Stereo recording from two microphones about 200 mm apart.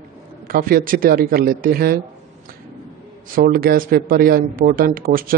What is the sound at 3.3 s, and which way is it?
Speech, 45° right (ahead or behind).